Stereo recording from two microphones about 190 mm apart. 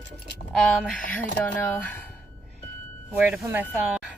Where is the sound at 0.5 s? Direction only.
5° left (ahead or behind).